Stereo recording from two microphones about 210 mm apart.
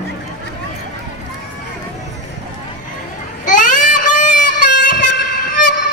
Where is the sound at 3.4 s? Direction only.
40° left (ahead or behind).